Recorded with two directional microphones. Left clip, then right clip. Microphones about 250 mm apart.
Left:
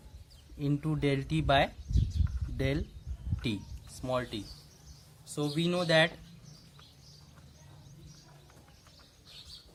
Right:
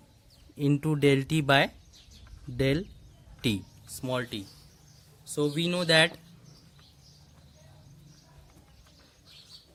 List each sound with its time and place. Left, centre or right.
0.6 s speech: right
4.0 s speech: right